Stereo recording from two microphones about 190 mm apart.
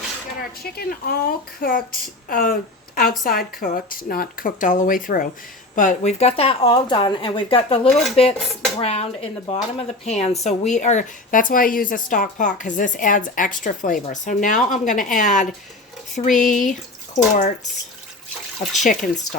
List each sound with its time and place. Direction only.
0.6 s speech: 55° left (ahead or behind)
18.8 s speech: 40° left (ahead or behind)